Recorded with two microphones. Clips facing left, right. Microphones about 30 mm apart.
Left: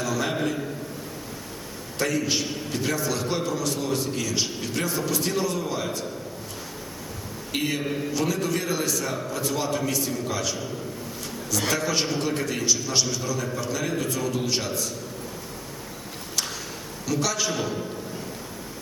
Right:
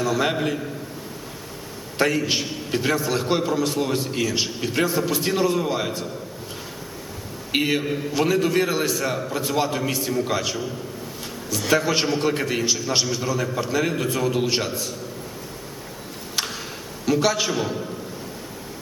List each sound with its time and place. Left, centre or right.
0.0 s a sound: right
2.0 s a man's voice: right
7.5 s a man's voice: right
11.7 s a man's voice: right
17.1 s a man's voice: right